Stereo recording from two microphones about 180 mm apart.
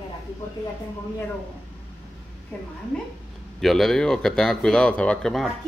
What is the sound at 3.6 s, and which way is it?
Speech, centre (ahead or behind).